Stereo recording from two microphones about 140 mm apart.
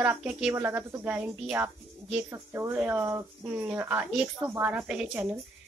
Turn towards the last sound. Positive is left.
turn(degrees=-10)  # may be behind; listen again after turning